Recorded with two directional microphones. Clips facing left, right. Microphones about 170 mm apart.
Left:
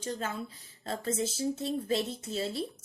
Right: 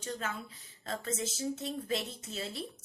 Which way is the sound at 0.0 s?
30° left (ahead or behind).